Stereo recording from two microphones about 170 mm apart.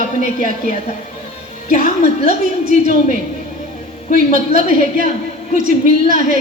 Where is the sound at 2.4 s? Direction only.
55° right (ahead or behind).